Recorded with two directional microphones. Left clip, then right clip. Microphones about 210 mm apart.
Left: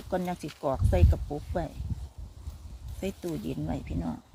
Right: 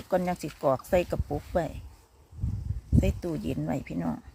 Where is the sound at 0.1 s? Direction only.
20° right (ahead or behind).